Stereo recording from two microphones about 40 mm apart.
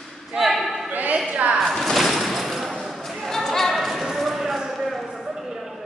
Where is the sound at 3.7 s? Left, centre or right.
Centre.